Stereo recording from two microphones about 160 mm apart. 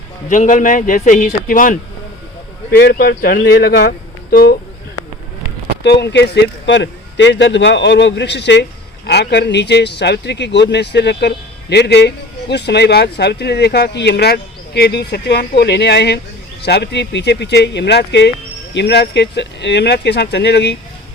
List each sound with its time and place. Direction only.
0.3 s a man's voice: 50° left (ahead or behind)
2.6 s speech: 90° left; by 4.5 s 75° left (ahead or behind)
5.8 s speech: 90° left